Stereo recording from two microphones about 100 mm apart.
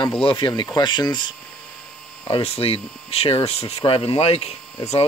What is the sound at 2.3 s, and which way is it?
Speech, 80° left.